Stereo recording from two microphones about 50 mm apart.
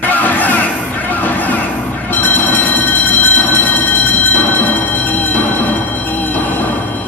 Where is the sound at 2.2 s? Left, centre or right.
Left.